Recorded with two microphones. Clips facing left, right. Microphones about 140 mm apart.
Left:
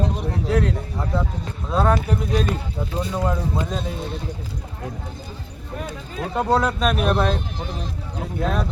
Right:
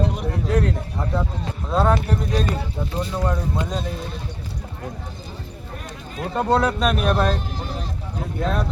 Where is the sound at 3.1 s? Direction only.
5° left (ahead or behind).